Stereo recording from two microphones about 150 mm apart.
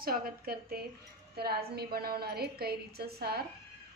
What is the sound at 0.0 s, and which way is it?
A woman's voice, 75° right (ahead or behind).